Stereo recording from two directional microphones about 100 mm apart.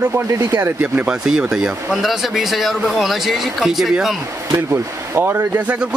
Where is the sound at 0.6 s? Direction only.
15° right (ahead or behind).